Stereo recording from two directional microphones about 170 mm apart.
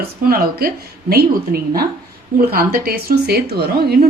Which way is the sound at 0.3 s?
60° right (ahead or behind).